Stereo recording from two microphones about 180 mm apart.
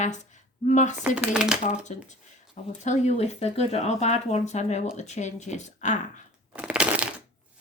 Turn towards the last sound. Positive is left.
turn(degrees=-5)  # may be behind; listen again after turning